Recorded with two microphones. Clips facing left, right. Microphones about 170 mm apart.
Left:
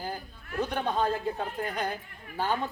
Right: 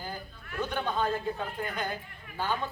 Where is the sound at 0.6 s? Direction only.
35° left (ahead or behind).